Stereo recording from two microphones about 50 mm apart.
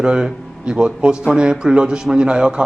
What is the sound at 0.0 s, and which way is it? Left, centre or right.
A man's voice, centre.